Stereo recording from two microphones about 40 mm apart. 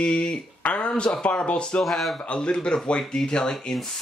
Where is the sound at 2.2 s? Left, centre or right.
Left.